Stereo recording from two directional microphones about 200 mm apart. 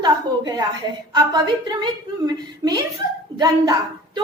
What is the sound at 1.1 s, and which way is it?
A woman's voice, 20° right (ahead or behind).